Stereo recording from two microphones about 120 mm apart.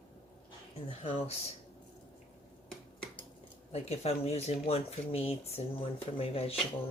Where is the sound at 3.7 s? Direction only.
60° left (ahead or behind).